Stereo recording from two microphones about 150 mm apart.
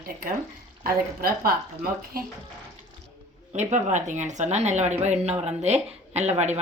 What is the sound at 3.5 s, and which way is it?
A woman's voice, 50° right (ahead or behind).